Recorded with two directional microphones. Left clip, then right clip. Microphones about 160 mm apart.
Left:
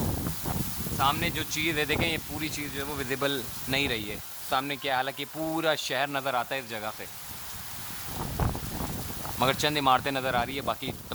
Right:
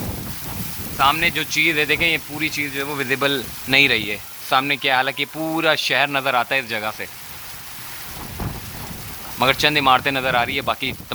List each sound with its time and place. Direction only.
0.9 s speech: 10° left (ahead or behind)
1.4 s speech: 30° left (ahead or behind)
2.7 s speech: 5° left (ahead or behind)
9.4 s speech: 20° left (ahead or behind)